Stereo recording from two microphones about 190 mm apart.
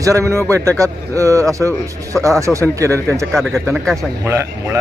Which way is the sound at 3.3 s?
Centre (ahead or behind).